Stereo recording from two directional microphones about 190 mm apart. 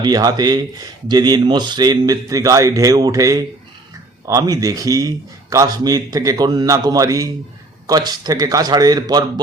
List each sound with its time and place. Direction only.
0.0 s speech: 20° right (ahead or behind)